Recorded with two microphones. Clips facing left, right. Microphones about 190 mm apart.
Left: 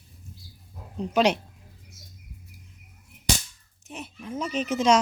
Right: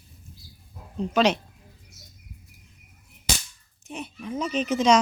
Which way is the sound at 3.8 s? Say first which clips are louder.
Right 3 dB; 5° left (ahead or behind).